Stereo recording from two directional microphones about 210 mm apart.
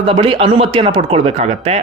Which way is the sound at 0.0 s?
25° right (ahead or behind).